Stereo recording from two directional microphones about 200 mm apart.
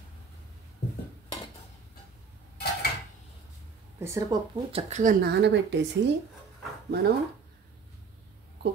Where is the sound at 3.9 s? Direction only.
15° right (ahead or behind).